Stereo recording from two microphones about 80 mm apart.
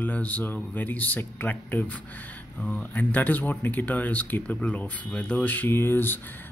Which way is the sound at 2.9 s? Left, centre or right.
Left.